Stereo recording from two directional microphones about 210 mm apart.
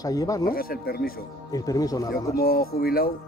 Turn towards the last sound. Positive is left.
turn(degrees=45)  # may be behind; listen again after turning